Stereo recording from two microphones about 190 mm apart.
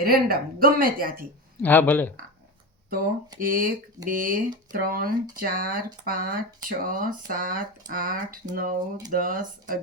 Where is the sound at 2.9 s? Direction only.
45° right (ahead or behind).